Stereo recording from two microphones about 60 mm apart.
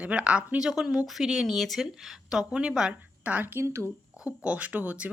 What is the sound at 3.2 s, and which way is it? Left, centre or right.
Speech, right.